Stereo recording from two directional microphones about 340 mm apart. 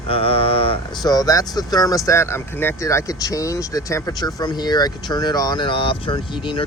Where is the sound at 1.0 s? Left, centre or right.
Centre.